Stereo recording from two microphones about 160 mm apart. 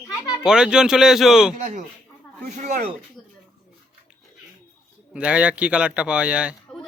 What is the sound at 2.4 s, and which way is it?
Speech, 45° right (ahead or behind).